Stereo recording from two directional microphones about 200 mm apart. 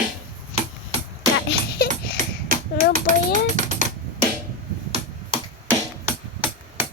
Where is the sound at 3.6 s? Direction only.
40° right (ahead or behind).